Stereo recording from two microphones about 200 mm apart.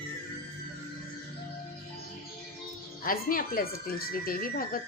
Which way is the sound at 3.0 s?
45° left (ahead or behind).